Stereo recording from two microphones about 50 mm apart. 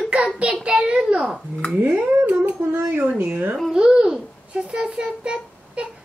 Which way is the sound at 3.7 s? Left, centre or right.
Centre.